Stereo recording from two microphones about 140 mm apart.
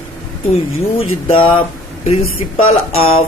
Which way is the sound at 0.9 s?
40° left (ahead or behind).